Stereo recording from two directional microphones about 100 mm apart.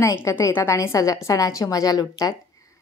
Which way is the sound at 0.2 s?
30° left (ahead or behind).